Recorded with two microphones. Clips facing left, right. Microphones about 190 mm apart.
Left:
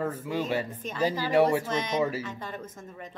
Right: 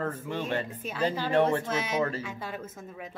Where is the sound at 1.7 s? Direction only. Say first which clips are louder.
Left 1 dB; 5° right (ahead or behind).